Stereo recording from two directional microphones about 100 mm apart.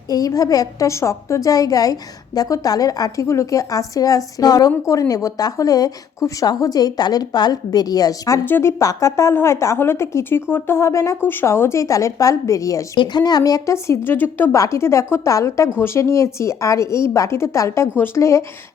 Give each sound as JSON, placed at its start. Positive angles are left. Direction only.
{"t": 0.1, "sound": "a woman's voice", "side_deg": 35}
{"t": 8.4, "sound": "a woman's voice", "side_deg": 20}
{"t": 8.8, "sound": "a woman's voice", "side_deg": 35}
{"t": 14.5, "sound": "a woman's voice", "side_deg": 30}